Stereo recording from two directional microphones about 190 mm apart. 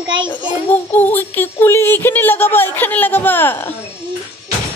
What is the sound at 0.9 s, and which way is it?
Speech, 10° left (ahead or behind).